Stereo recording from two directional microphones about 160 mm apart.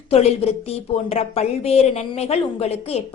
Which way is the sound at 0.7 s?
40° left (ahead or behind).